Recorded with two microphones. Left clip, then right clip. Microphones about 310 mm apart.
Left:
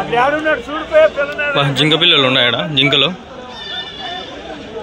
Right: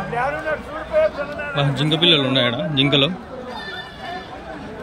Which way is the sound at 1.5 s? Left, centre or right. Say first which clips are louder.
Left 7 dB; centre.